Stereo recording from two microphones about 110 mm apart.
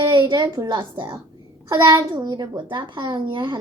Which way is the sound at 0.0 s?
45° right (ahead or behind).